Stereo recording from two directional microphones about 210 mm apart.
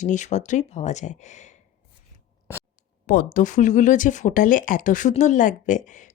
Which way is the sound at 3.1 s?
40° left (ahead or behind).